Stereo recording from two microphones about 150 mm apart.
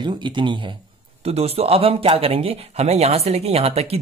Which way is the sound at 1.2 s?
45° right (ahead or behind).